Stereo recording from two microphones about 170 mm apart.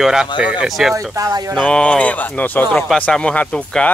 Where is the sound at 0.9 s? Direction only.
20° right (ahead or behind).